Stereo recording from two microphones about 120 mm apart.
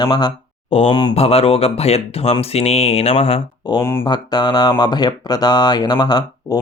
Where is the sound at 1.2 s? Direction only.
55° left (ahead or behind).